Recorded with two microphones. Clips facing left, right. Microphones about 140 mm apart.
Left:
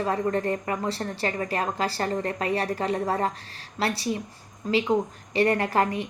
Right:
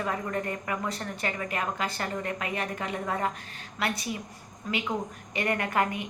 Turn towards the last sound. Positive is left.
turn(degrees=30)  # may be behind; listen again after turning